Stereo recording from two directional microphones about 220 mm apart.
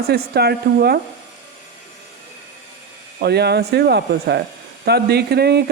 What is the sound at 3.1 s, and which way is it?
Speech, 50° right (ahead or behind).